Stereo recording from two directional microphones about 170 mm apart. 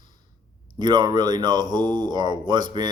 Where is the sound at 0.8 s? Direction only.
25° right (ahead or behind).